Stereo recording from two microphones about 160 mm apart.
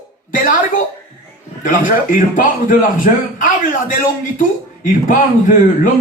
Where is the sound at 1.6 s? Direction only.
55° left (ahead or behind).